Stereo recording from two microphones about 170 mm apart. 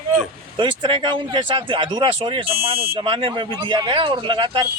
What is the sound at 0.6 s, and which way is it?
Speech, 30° right (ahead or behind).